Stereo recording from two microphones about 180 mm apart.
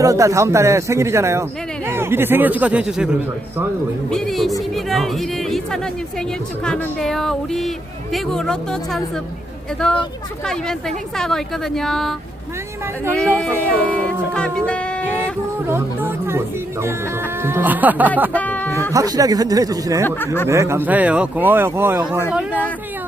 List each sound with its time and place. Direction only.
0.0 s speech: 15° right (ahead or behind); by 4.5 s centre (ahead or behind)
4.7 s music: centre (ahead or behind)
6.7 s speech: 5° left (ahead or behind)
13.1 s speech: 5° left (ahead or behind)
14.7 s music: 5° left (ahead or behind)
15.6 s speech: 10° right (ahead or behind)
18.3 s speech: 10° left (ahead or behind)
18.7 s speech: 15° right (ahead or behind)
20.1 s speech: 10° left (ahead or behind)
20.5 s speech: 15° right (ahead or behind)